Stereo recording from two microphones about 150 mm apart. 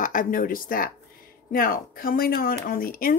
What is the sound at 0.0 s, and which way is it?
A woman's voice, 60° left (ahead or behind).